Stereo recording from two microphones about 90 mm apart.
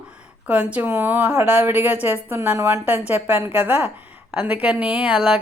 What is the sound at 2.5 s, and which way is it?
Speech, 30° right (ahead or behind).